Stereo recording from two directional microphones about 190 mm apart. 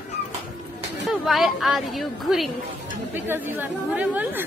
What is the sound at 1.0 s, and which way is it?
Speech, centre (ahead or behind).